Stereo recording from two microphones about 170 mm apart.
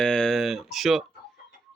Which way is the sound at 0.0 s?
5° left (ahead or behind).